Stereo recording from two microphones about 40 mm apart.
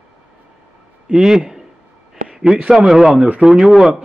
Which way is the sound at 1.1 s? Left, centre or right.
Centre.